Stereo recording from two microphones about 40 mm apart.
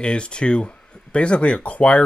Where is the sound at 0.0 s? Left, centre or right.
Left.